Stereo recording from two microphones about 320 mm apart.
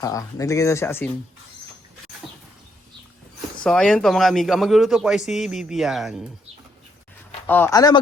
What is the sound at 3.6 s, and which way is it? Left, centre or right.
Speech, centre.